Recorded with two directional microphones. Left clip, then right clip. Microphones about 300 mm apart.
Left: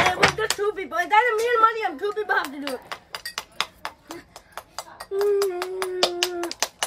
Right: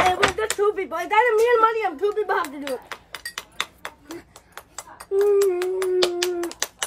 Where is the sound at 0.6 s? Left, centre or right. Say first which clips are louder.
Right 2 dB; centre.